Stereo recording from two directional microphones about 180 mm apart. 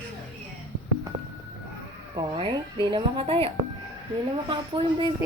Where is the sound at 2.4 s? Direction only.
25° right (ahead or behind).